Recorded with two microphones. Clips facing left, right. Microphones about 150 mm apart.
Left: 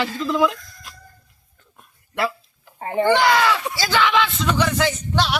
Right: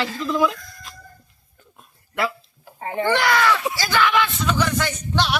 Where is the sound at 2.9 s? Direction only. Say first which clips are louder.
Left 3 dB; 5° left (ahead or behind).